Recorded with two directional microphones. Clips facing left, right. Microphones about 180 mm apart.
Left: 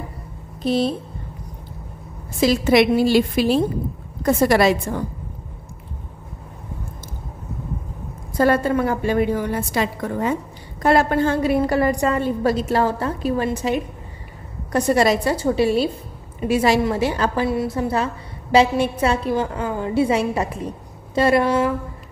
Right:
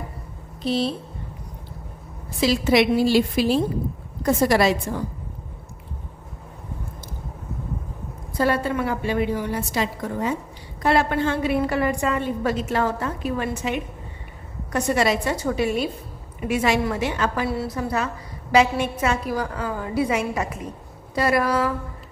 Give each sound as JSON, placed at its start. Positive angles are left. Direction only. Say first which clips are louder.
{"t": 0.7, "sound": "a woman's voice", "louder": "left 3 dB", "side_deg": 50}
{"t": 2.4, "sound": "a woman's voice", "louder": "left 3 dB", "side_deg": 50}
{"t": 8.3, "sound": "a woman's voice", "louder": "left 4 dB", "side_deg": 45}
{"t": 17.5, "sound": "a woman's voice", "louder": "left 4 dB", "side_deg": 25}